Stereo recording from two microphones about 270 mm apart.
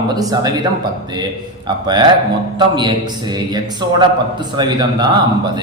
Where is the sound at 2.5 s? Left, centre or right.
Centre.